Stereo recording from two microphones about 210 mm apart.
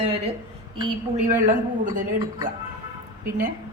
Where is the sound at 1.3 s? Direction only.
40° right (ahead or behind).